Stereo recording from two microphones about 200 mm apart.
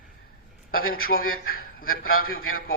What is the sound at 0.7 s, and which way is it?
Speech, 90° left.